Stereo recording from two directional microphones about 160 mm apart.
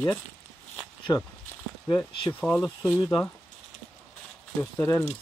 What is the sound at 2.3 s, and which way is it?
Speech, 10° left (ahead or behind).